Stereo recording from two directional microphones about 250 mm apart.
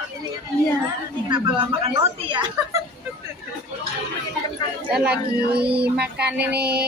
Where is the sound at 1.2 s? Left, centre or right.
Centre.